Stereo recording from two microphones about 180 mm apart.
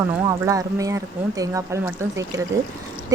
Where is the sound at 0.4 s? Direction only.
20° right (ahead or behind).